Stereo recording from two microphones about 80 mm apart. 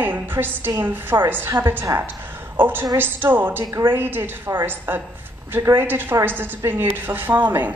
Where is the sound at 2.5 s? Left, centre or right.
Right.